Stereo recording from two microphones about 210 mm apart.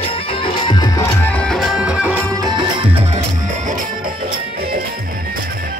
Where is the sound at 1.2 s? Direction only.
5° left (ahead or behind).